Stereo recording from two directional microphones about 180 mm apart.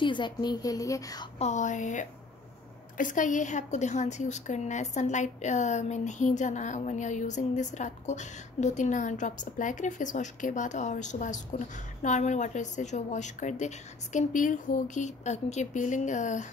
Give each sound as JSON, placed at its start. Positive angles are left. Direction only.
{"t": 0.0, "sound": "a woman's voice", "side_deg": 25}
{"t": 1.4, "sound": "a woman's voice", "side_deg": 40}